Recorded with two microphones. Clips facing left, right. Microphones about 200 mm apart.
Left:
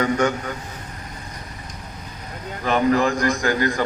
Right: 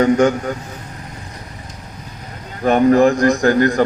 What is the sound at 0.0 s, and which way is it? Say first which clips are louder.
Speech: right 7 dB; 45° right (ahead or behind).